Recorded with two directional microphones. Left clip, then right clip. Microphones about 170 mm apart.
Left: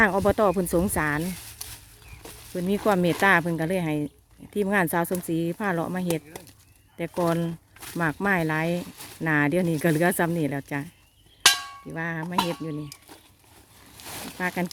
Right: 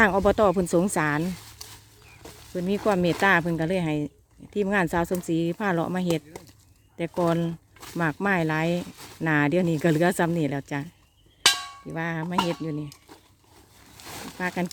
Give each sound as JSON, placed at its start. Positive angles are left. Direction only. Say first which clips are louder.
{"t": 0.0, "sound": "speech", "louder": "right 1 dB", "side_deg": -5}
{"t": 1.2, "sound": "speech", "louder": "right 1 dB", "side_deg": 15}
{"t": 2.2, "sound": "a sound", "louder": "left 1 dB", "side_deg": -10}
{"t": 2.6, "sound": "speech", "louder": "left 1 dB", "side_deg": 0}
{"t": 6.3, "sound": "a sound", "louder": "left 1 dB", "side_deg": 5}
{"t": 6.9, "sound": "speech", "louder": "right 1 dB", "side_deg": -5}
{"t": 11.4, "sound": "music", "louder": "left 1 dB", "side_deg": 0}
{"t": 11.9, "sound": "speech", "louder": "right 1 dB", "side_deg": -10}
{"t": 13.9, "sound": "a sound", "louder": "left 1 dB", "side_deg": -10}
{"t": 14.3, "sound": "speech", "louder": "left 1 dB", "side_deg": -5}